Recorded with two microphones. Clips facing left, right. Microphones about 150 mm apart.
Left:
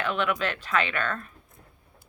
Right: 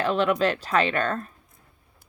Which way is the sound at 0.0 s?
35° right (ahead or behind).